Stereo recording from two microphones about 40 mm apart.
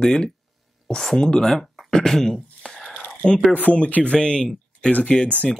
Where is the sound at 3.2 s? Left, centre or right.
Left.